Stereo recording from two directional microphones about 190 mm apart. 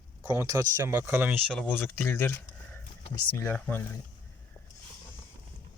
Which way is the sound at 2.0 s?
10° left (ahead or behind).